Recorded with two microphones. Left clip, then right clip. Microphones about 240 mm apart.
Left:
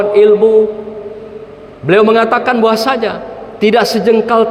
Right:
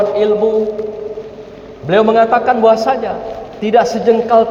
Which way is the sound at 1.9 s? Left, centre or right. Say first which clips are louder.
Left 1 dB; left.